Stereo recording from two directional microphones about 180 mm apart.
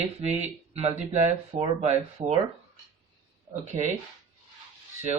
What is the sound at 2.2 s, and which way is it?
Speech, 25° right (ahead or behind).